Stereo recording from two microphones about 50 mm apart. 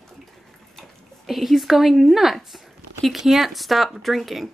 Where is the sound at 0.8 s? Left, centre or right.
Centre.